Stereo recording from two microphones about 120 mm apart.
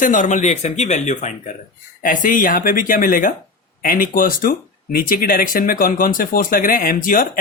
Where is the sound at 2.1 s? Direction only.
90° left.